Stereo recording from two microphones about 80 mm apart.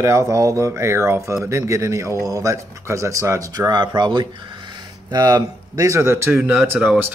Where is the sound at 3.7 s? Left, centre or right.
Right.